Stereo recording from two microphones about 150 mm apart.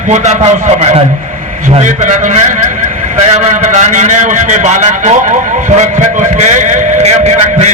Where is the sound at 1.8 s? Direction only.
55° right (ahead or behind).